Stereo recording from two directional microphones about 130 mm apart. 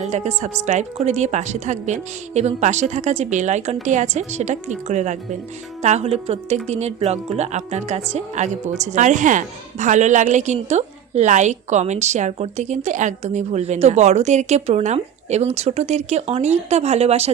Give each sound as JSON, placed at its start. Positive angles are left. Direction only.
{"t": 0.0, "sound": "speech", "side_deg": -60}